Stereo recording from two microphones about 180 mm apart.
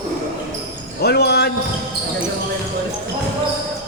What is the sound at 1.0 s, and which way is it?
Basketball bounce, 60° left (ahead or behind).